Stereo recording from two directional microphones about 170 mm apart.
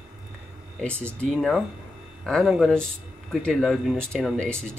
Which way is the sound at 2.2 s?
Centre (ahead or behind).